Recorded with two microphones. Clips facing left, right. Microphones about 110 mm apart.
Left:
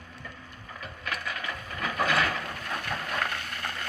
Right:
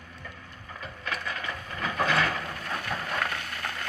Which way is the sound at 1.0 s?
10° left (ahead or behind).